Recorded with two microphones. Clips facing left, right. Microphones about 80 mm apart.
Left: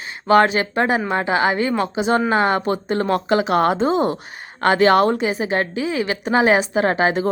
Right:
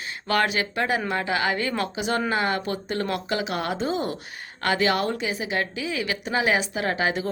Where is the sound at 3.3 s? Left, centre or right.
Left.